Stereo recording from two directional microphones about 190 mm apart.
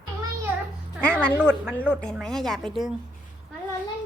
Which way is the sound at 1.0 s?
5° left (ahead or behind).